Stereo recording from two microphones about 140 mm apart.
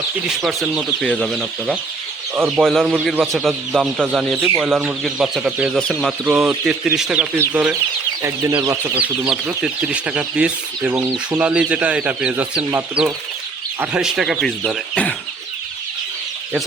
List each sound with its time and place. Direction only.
0.3 s speech: centre (ahead or behind)
8.2 s speech: 20° right (ahead or behind)
9.0 s speech: 5° right (ahead or behind)